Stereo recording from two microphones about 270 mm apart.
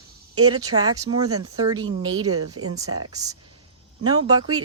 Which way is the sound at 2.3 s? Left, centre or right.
Right.